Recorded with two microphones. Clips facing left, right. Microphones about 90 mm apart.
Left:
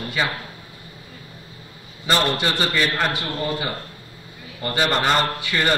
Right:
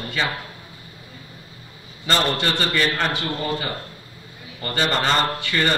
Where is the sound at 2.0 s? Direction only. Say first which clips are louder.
Left 1 dB; 10° left (ahead or behind).